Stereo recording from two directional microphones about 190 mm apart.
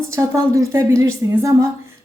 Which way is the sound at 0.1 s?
15° right (ahead or behind).